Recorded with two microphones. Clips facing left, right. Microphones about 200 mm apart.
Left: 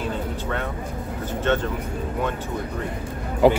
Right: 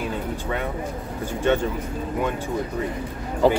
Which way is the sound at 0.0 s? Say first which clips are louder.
Even; 10° right (ahead or behind).